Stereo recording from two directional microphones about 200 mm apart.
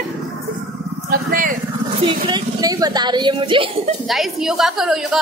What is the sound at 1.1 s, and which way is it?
Speech, 45° right (ahead or behind).